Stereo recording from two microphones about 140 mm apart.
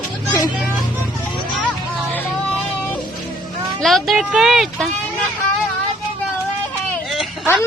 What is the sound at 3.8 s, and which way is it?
Speech, centre (ahead or behind).